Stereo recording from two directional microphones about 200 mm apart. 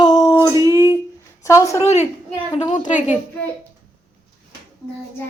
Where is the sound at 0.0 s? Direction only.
15° left (ahead or behind).